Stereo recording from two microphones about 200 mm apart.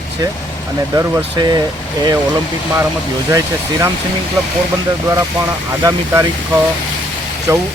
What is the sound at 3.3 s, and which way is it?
Speech, 15° right (ahead or behind).